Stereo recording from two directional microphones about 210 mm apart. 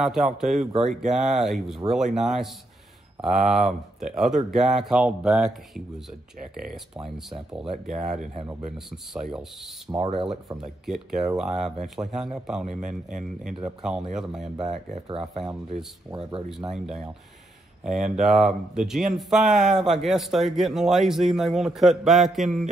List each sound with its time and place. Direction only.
0.0 s speech: centre (ahead or behind)
7.2 s speech: centre (ahead or behind)
7.8 s speech: 35° right (ahead or behind)
8.7 s speech: centre (ahead or behind)
9.8 s speech: 25° right (ahead or behind)
10.6 s speech: centre (ahead or behind)
13.7 s speech: 5° right (ahead or behind)
14.6 s speech: 30° right (ahead or behind)
18.2 s speech: centre (ahead or behind)